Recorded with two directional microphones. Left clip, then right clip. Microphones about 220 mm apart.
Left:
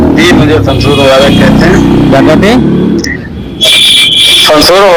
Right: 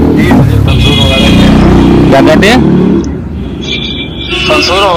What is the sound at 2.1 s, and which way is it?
Speech, 15° left (ahead or behind).